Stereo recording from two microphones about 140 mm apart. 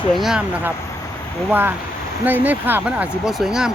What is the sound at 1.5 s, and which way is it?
Speech, 15° right (ahead or behind).